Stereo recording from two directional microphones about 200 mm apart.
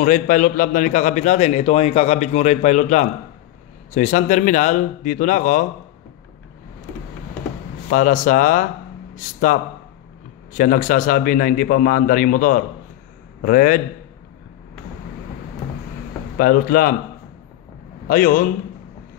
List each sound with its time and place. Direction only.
0.0 s a man's voice: 40° left (ahead or behind)
7.9 s a man's voice: 40° left (ahead or behind)
16.3 s a man's voice: 45° left (ahead or behind)
18.0 s a man's voice: 45° left (ahead or behind)